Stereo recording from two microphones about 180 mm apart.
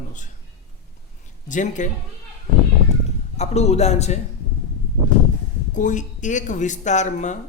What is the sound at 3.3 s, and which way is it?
Speech, 35° left (ahead or behind).